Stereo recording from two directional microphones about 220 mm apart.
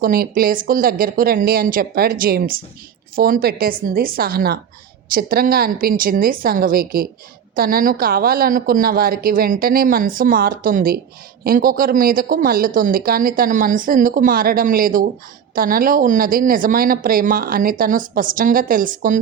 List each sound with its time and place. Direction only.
0.0 s speech: 40° right (ahead or behind)